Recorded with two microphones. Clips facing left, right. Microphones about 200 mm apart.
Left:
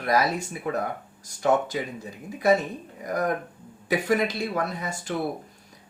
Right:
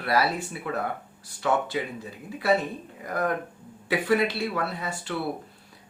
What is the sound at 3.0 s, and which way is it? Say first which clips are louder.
Speech: left 1 dB; 40° left (ahead or behind).